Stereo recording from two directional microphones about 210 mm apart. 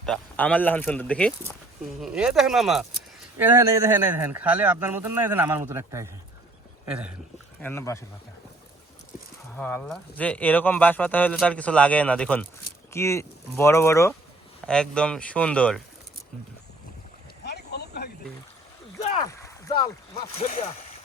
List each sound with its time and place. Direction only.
0.0 s speech: 5° left (ahead or behind)
3.3 s speech: 10° right (ahead or behind)
7.6 s speech: 10° left (ahead or behind)
9.6 s speech: 10° left (ahead or behind)
17.4 s boat: 50° left (ahead or behind)
19.2 s a sound: 15° left (ahead or behind)
20.4 s speech: 35° left (ahead or behind)